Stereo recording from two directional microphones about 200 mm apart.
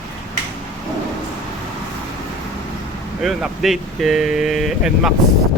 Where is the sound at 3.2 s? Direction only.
Centre (ahead or behind).